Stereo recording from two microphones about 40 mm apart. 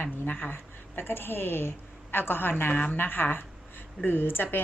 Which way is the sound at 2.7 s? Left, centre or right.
Left.